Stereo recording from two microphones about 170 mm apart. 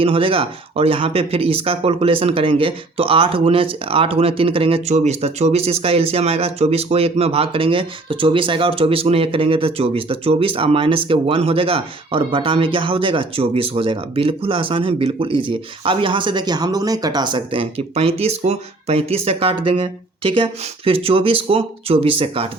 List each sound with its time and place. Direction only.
0.0 s speech: 35° right (ahead or behind)